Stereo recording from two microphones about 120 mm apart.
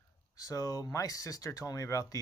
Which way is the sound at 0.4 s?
30° left (ahead or behind).